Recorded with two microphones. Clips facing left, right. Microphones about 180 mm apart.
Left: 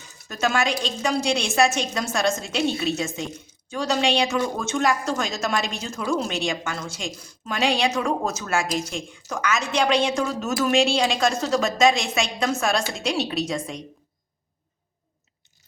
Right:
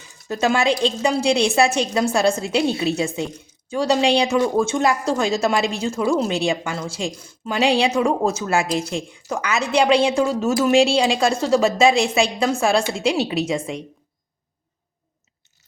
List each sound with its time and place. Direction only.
0.3 s a woman's voice: 30° right (ahead or behind)
13.2 s a woman's voice: 10° right (ahead or behind)